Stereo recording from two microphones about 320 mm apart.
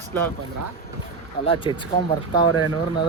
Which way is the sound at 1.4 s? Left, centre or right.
Centre.